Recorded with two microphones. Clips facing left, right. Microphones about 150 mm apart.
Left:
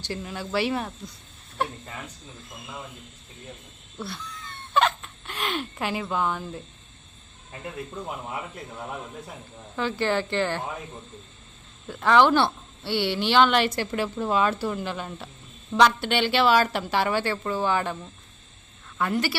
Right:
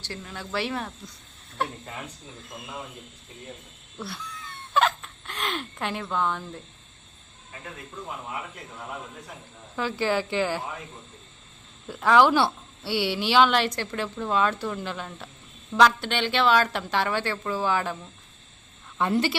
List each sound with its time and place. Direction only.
0.0 s a woman's voice: 10° left (ahead or behind)
3.9 s a sound: 5° right (ahead or behind)
9.7 s a woman's voice: 5° right (ahead or behind)
11.9 s a woman's voice: 5° right (ahead or behind)
18.9 s a woman's voice: 25° right (ahead or behind)